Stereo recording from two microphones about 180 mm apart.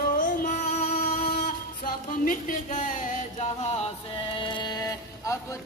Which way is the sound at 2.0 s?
50° left (ahead or behind).